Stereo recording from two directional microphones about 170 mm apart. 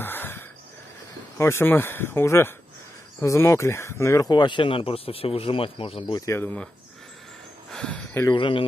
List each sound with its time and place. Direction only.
0.0 s wheeze: 10° left (ahead or behind)
1.4 s speech: 15° left (ahead or behind)
7.7 s a sound: 5° left (ahead or behind)
8.4 s speech: 30° left (ahead or behind)